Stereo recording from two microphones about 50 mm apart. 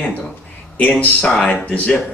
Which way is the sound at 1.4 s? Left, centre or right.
Left.